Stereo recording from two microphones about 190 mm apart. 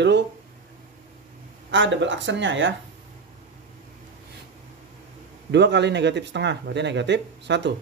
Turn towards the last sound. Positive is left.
turn(degrees=-70)  # may be behind; listen again after turning